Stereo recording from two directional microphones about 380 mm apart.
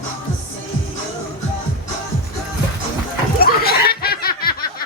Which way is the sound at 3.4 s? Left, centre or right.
Left.